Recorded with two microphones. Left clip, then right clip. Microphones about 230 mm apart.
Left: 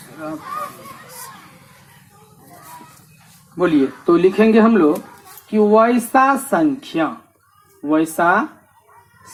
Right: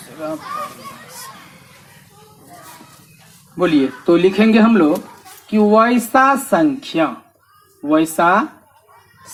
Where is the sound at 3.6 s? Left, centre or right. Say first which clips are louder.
Right 1 dB; right.